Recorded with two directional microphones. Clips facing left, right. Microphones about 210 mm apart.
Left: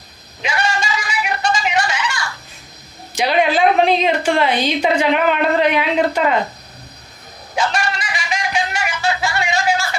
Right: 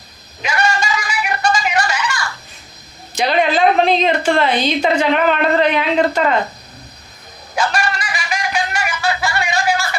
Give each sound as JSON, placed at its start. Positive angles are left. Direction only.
{"t": 0.4, "sound": "a sound", "side_deg": 30}
{"t": 3.2, "sound": "a woman's voice", "side_deg": 10}
{"t": 7.5, "sound": "music", "side_deg": 25}